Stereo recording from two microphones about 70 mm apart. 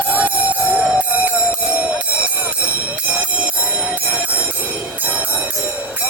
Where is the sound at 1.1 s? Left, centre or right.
Right.